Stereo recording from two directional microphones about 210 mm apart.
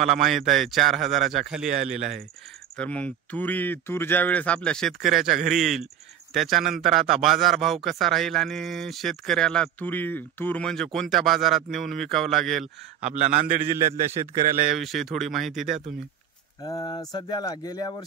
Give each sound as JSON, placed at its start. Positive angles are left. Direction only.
{"t": 0.0, "sound": "a man's voice", "side_deg": 0}
{"t": 2.8, "sound": "a man's voice", "side_deg": 5}
{"t": 13.0, "sound": "a man's voice", "side_deg": -35}
{"t": 14.7, "sound": "a man's voice", "side_deg": 0}
{"t": 16.6, "sound": "speech", "side_deg": 20}